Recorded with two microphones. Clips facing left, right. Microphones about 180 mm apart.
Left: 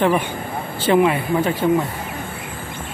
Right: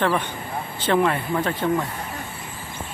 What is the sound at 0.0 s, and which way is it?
Speech, 15° left (ahead or behind).